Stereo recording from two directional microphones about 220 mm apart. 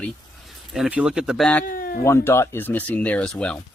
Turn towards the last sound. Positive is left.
turn(degrees=5)  # may be behind; listen again after turning